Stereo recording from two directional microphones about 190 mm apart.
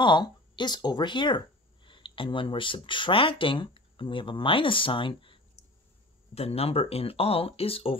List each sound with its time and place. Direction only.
0.0 s speech: 25° left (ahead or behind)